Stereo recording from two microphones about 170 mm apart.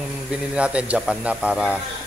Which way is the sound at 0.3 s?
5° right (ahead or behind).